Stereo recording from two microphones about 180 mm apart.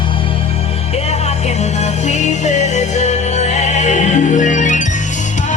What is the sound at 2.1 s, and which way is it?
Music, 40° left (ahead or behind).